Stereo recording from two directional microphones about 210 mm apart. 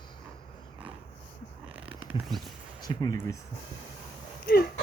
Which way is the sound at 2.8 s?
20° left (ahead or behind).